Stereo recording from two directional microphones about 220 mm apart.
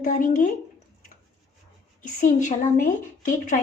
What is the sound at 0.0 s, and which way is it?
Speech, 35° left (ahead or behind).